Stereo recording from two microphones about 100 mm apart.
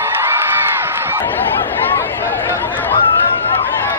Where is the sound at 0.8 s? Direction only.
25° right (ahead or behind).